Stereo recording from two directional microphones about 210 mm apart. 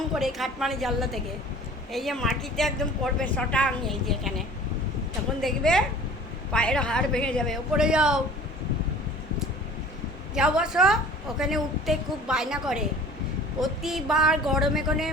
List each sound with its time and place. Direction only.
0.1 s a woman's voice: centre (ahead or behind)
10.3 s a woman's voice: 5° right (ahead or behind)